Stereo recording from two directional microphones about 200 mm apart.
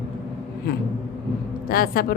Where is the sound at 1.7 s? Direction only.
45° left (ahead or behind).